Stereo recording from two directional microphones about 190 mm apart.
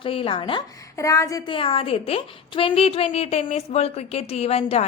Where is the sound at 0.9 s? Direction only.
15° left (ahead or behind).